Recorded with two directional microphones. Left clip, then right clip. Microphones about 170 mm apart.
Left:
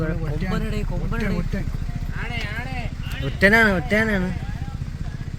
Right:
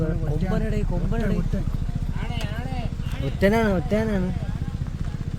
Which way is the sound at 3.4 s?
5° right (ahead or behind).